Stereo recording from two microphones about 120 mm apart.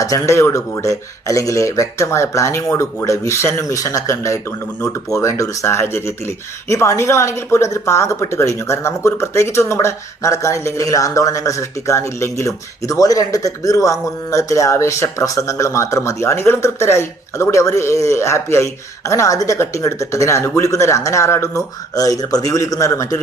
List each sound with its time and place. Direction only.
0.0 s speech: 25° left (ahead or behind)